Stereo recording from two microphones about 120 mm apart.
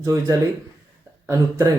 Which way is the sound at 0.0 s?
30° right (ahead or behind).